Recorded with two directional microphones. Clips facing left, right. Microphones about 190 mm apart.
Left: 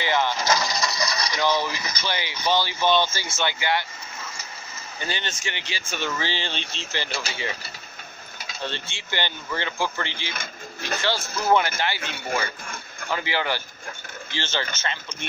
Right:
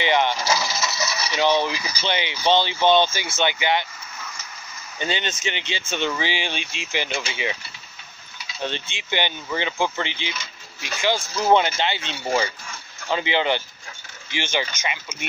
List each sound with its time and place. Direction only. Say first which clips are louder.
0.0 s speech: right 3 dB; 20° right (ahead or behind)
0.4 s coin: even; 5° right (ahead or behind)
1.5 s speech: right 3 dB; 10° right (ahead or behind)
2.0 s speech: right 4 dB; 20° right (ahead or behind)
5.0 s speech: right 5 dB; 20° right (ahead or behind)
8.6 s speech: right 4 dB; 15° right (ahead or behind)